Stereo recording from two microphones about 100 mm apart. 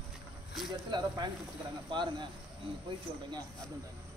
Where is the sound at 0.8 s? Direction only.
45° right (ahead or behind).